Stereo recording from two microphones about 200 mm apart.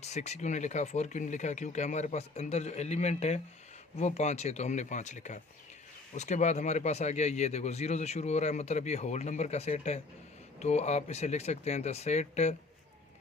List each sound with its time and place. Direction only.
0.0 s speech: 35° left (ahead or behind)